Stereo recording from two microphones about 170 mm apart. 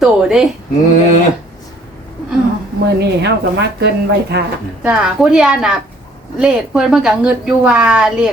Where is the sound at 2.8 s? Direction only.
80° right.